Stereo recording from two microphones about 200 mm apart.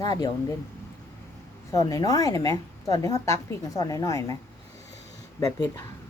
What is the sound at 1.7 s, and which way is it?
A woman's voice, 20° left (ahead or behind).